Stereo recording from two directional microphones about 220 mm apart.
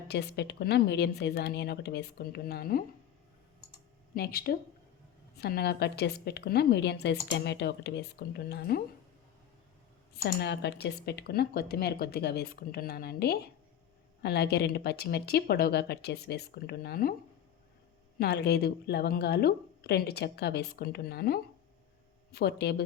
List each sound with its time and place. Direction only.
0.1 s a woman's voice: 50° left (ahead or behind)
4.1 s a woman's voice: 45° left (ahead or behind)
10.2 s a woman's voice: 50° left (ahead or behind)
18.2 s a woman's voice: 50° left (ahead or behind)